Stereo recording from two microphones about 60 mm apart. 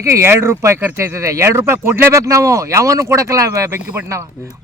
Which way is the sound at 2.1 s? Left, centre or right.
Right.